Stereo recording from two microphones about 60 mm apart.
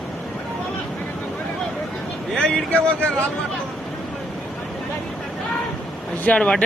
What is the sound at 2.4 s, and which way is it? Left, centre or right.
Speech, centre.